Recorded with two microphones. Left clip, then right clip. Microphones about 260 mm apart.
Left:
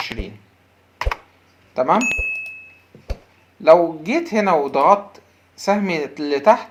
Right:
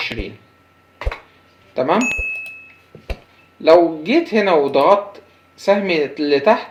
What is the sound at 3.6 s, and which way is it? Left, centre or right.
Speech, left.